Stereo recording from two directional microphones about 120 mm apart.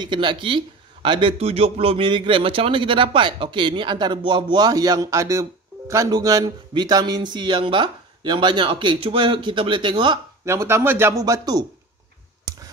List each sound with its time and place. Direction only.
0.0 s a man's voice: 40° right (ahead or behind)
10.4 s speech: 25° right (ahead or behind)